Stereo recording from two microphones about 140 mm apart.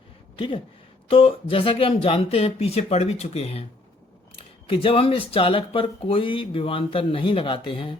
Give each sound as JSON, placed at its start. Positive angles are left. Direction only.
{"t": 0.3, "sound": "speech", "side_deg": 40}